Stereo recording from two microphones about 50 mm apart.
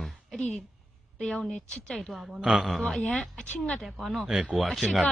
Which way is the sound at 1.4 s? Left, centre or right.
Centre.